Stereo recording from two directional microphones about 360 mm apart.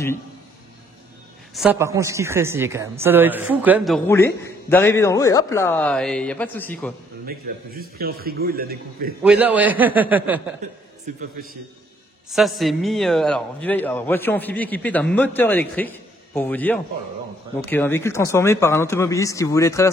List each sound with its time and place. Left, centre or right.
1.5 s a man's voice: centre
7.2 s a man's voice: right
9.2 s a man's voice: centre
11.1 s a man's voice: right
12.3 s a man's voice: centre